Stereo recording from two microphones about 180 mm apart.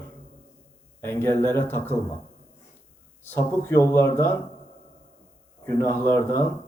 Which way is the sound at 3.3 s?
15° left (ahead or behind).